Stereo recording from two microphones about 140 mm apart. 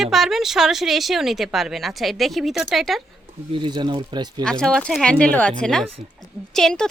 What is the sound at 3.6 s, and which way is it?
Speech, 30° right (ahead or behind).